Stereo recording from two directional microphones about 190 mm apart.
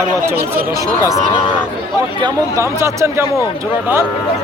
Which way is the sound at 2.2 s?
15° right (ahead or behind).